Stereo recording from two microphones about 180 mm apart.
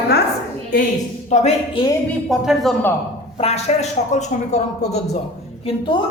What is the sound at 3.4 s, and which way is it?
Speech, 35° left (ahead or behind).